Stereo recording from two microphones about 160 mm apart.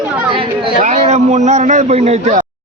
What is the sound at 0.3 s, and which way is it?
Chatter, 30° right (ahead or behind).